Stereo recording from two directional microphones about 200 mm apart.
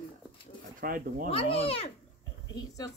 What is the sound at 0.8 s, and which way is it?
Speech, 45° right (ahead or behind).